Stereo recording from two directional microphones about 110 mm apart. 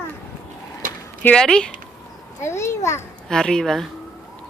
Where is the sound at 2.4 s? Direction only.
25° left (ahead or behind).